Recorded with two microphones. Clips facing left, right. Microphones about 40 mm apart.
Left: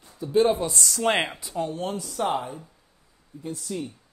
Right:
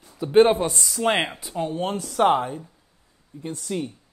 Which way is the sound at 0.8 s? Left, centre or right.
Centre.